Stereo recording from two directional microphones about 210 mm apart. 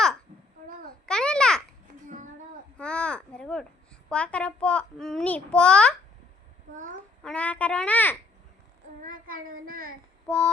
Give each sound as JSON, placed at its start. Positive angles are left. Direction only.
{"t": 0.6, "sound": "babbling", "side_deg": -40}
{"t": 1.0, "sound": "babbling", "side_deg": 5}
{"t": 2.0, "sound": "a sound", "side_deg": -35}
{"t": 2.7, "sound": "babbling", "side_deg": 5}
{"t": 4.1, "sound": "a child's voice", "side_deg": 5}
{"t": 7.2, "sound": "a child's voice", "side_deg": 5}
{"t": 9.0, "sound": "a child's voice", "side_deg": -40}
{"t": 10.2, "sound": "a child's voice", "side_deg": 5}